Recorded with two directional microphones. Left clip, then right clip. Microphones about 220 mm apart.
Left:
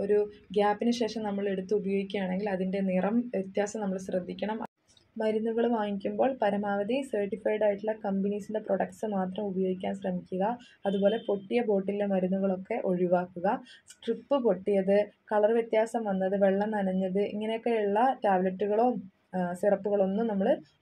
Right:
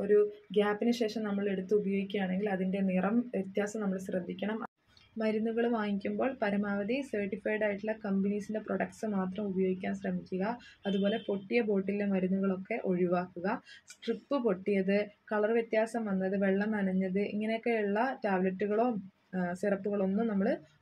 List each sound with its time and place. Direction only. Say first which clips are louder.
0.1 s a woman's voice: right 2 dB; 15° left (ahead or behind)